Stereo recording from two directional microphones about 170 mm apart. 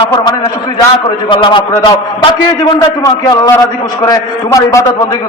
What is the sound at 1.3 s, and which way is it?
A man's voice, 30° left (ahead or behind).